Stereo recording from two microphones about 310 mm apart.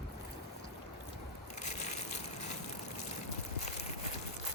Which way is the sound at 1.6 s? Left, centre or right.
Left.